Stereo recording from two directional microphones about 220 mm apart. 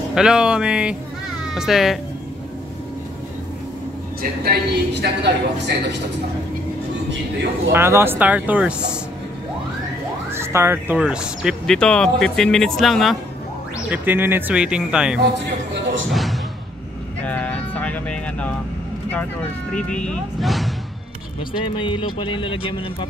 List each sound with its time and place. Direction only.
0.1 s speech: 5° right (ahead or behind)
4.2 s a man's voice: 45° right (ahead or behind)
7.7 s speech: 10° right (ahead or behind)
10.3 s speech: 10° right (ahead or behind)
16.1 s music: centre (ahead or behind)
17.2 s vehicle: 5° left (ahead or behind)
19.0 s speech: 10° left (ahead or behind)
21.7 s speech: 25° left (ahead or behind)